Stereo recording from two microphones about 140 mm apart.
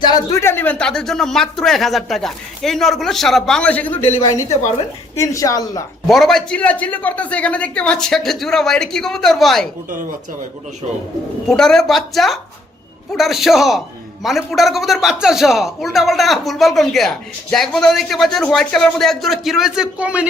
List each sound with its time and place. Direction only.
0.0 s a man's voice: 25° left (ahead or behind); by 4.1 s 10° left (ahead or behind)
4.2 s a woman's voice: 20° left (ahead or behind)
6.1 s a man's voice: centre (ahead or behind)
11.4 s a man's voice: 5° left (ahead or behind)